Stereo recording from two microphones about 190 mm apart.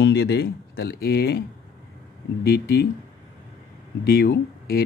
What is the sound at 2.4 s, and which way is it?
Speech, 55° left (ahead or behind).